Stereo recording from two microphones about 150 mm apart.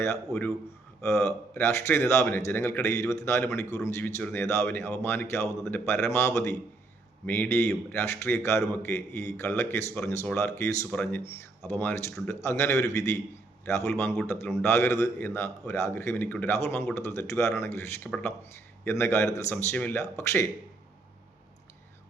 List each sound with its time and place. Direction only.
0.3 s speech: 5° left (ahead or behind)
1.0 s a man's voice: 20° left (ahead or behind)